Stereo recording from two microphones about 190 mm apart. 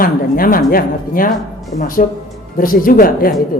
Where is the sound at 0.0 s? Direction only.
50° left (ahead or behind).